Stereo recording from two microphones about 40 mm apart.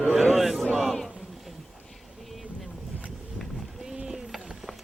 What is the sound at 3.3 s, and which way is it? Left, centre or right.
Run, centre.